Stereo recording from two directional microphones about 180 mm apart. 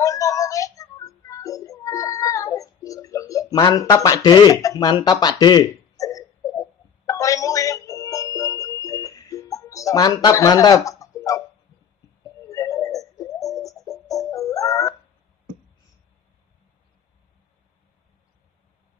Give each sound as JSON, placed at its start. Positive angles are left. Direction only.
{"t": 0.0, "sound": "music", "side_deg": 20}
{"t": 12.4, "sound": "music", "side_deg": 20}